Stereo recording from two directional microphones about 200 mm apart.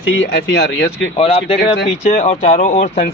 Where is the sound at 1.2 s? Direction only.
30° left (ahead or behind).